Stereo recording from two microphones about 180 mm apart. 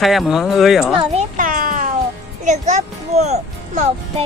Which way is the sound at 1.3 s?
50° right (ahead or behind).